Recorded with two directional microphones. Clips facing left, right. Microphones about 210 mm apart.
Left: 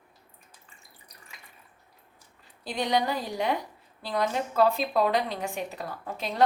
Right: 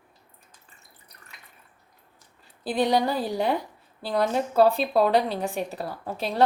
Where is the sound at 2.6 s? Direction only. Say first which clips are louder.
Right 4 dB; 35° right (ahead or behind).